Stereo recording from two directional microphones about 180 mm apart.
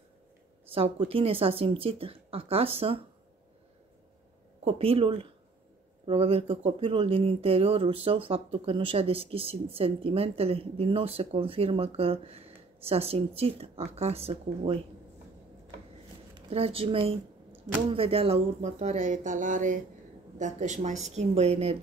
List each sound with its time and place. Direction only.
0.7 s speech: 30° right (ahead or behind)
4.6 s speech: 35° right (ahead or behind)
16.3 s speech: 35° right (ahead or behind)